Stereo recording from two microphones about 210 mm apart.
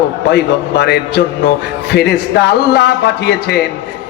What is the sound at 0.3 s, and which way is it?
A man's voice, 55° left (ahead or behind).